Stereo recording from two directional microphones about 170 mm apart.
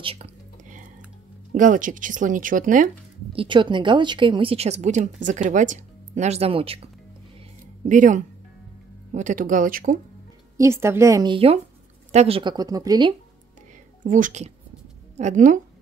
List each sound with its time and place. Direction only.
0.0 s a woman's voice: 35° right (ahead or behind)
1.5 s speech: 50° right (ahead or behind)
3.3 s a woman's voice: 30° right (ahead or behind)
7.8 s speech: 45° right (ahead or behind)
10.6 s a woman's voice: 15° right (ahead or behind)
11.3 s a woman's voice: 35° right (ahead or behind)
14.0 s speech: 50° right (ahead or behind)